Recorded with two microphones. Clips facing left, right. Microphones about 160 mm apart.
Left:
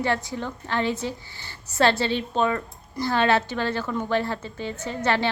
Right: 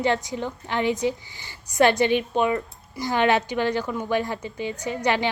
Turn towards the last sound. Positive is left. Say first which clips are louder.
# right 1 dB
turn(degrees=-15)  # may be behind; listen again after turning